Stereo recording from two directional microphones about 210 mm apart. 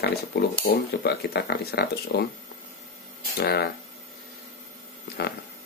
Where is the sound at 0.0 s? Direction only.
50° left (ahead or behind).